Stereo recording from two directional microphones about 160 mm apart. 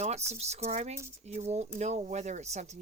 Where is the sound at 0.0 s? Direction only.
45° right (ahead or behind).